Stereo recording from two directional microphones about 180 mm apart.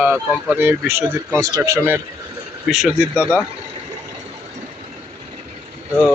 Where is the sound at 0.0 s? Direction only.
10° right (ahead or behind).